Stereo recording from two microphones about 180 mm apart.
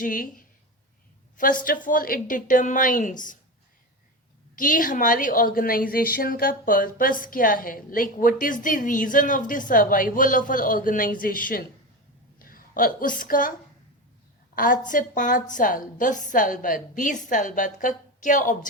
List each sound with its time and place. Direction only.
0.0 s a woman's voice: 50° left (ahead or behind)
4.5 s a woman's voice: 50° left (ahead or behind)
14.5 s a woman's voice: 50° left (ahead or behind)